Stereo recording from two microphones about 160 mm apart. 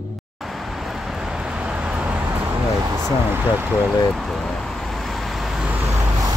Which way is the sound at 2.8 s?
15° right (ahead or behind).